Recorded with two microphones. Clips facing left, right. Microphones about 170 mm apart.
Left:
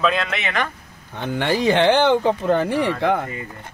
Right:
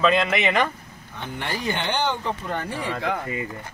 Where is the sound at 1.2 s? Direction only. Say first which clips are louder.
Left 9 dB; 90° left; by 3.2 s 60° left (ahead or behind).